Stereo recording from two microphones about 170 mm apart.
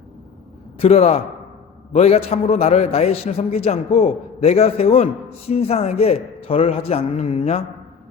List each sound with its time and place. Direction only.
0.8 s a man's voice: 35° left (ahead or behind)